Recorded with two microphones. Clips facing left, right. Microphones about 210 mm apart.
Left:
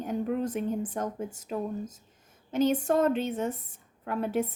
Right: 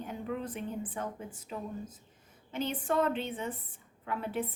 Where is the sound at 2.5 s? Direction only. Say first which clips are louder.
Left 7 dB; 45° left (ahead or behind).